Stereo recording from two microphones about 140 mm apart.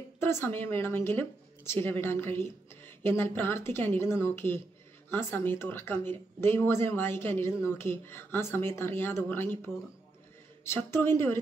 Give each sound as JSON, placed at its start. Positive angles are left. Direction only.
{"t": 0.2, "sound": "speech", "side_deg": 15}